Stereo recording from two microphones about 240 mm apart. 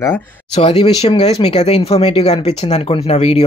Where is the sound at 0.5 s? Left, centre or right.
Left.